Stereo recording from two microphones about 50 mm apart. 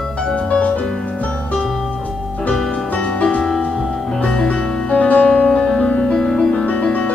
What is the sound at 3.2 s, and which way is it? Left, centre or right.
Music, left.